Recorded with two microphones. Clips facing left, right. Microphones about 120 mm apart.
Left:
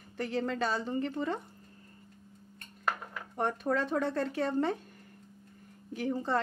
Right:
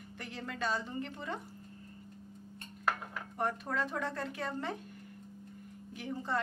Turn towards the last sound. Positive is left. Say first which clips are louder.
# left 6 dB
turn(degrees=40)  # may be behind; listen again after turning